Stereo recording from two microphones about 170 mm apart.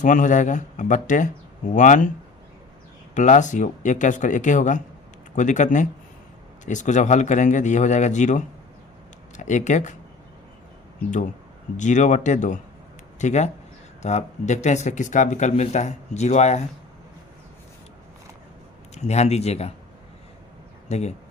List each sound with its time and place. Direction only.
0.0 s speech: 50° left (ahead or behind)
3.2 s speech: 45° left (ahead or behind)
11.8 s speech: 45° left (ahead or behind)
19.0 s speech: 40° left (ahead or behind)
20.9 s speech: 40° left (ahead or behind)